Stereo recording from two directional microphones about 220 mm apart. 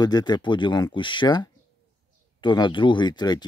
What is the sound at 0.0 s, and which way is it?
Speech, 20° left (ahead or behind).